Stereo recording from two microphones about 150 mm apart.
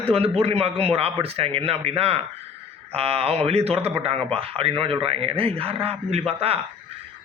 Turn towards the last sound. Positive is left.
turn(degrees=-40)  # may be behind; listen again after turning